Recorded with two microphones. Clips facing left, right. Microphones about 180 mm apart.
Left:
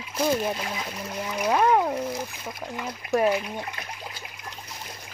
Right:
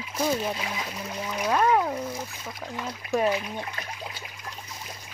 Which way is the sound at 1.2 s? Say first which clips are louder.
Left 2 dB; 5° left (ahead or behind).